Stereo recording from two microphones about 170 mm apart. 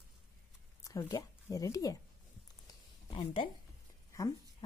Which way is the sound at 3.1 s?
30° left (ahead or behind).